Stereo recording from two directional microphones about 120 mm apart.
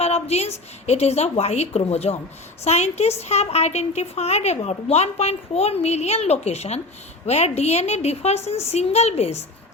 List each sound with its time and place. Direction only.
0.0 s a woman's voice: 60° left (ahead or behind)